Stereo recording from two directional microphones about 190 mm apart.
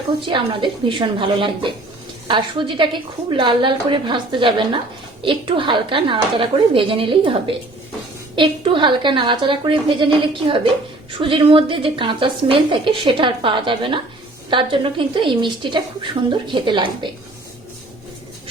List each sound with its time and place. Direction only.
0.2 s a woman's voice: 25° right (ahead or behind)